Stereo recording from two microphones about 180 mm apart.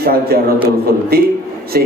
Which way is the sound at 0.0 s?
55° right (ahead or behind).